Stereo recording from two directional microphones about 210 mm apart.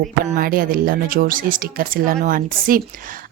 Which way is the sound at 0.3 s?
40° right (ahead or behind).